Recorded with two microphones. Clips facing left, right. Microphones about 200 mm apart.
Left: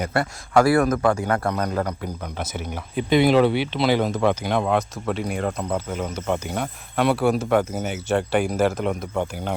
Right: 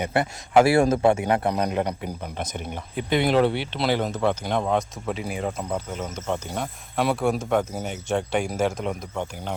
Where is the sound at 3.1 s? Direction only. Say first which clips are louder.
Left 4 dB; 90° left.